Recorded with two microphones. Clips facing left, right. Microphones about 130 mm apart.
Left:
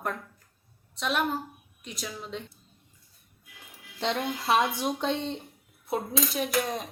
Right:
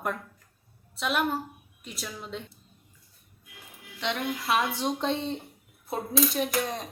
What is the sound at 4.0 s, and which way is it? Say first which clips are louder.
Speech: left 1 dB; 35° left (ahead or behind).